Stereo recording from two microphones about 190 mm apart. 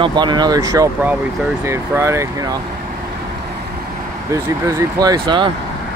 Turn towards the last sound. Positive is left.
turn(degrees=-25)  # may be behind; listen again after turning